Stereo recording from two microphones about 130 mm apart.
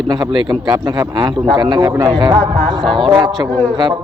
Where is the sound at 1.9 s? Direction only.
25° right (ahead or behind).